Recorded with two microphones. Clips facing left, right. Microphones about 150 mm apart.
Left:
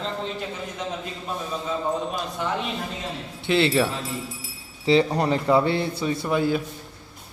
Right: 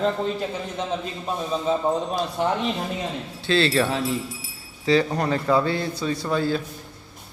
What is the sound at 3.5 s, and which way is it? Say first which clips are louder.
Speech: even; 20° left (ahead or behind).